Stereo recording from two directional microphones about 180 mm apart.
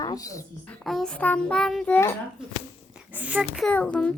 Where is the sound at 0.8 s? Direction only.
Centre (ahead or behind).